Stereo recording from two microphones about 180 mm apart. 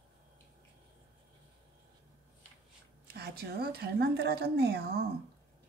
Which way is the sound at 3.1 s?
60° right (ahead or behind).